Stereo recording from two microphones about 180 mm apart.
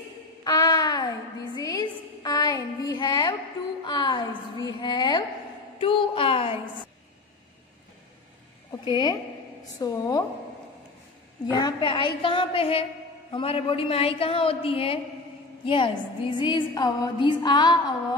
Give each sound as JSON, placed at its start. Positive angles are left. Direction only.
{"t": 0.4, "sound": "a sound", "side_deg": 20}
{"t": 9.8, "sound": "a woman's voice", "side_deg": 20}
{"t": 11.5, "sound": "a woman's voice", "side_deg": 25}